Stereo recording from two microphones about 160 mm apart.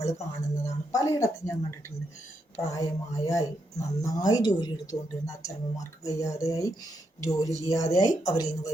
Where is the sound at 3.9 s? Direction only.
20° left (ahead or behind).